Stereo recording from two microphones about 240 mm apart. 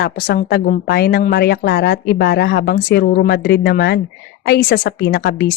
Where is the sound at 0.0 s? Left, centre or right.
Left.